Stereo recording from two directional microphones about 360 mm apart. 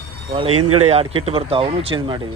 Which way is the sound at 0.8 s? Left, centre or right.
Centre.